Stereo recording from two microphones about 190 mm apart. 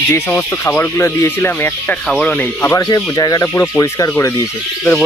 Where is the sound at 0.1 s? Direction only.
10° left (ahead or behind).